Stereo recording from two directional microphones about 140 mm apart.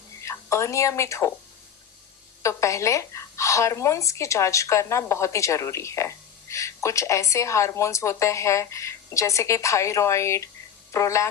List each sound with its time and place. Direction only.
0.2 s a woman's voice: 20° left (ahead or behind)
2.4 s speech: 20° left (ahead or behind)